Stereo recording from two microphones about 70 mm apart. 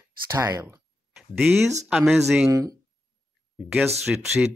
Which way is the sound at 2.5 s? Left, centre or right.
Right.